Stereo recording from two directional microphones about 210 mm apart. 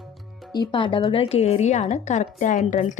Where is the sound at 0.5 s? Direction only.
20° left (ahead or behind).